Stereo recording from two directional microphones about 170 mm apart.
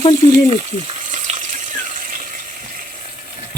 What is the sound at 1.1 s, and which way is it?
Water tap, 45° right (ahead or behind).